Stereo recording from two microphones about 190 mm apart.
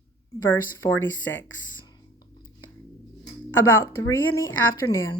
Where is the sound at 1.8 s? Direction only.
20° left (ahead or behind).